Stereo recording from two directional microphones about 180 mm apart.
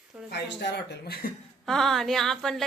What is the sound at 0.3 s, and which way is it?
Speech, 70° left (ahead or behind).